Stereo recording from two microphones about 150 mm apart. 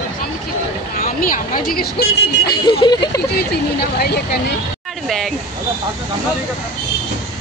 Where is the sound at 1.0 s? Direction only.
65° left (ahead or behind).